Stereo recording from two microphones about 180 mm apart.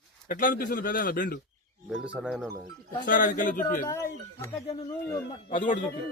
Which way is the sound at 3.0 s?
50° left (ahead or behind).